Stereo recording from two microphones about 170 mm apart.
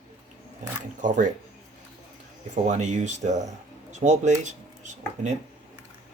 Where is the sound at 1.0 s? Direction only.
45° right (ahead or behind).